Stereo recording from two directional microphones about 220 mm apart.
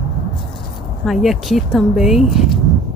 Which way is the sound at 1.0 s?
Centre (ahead or behind).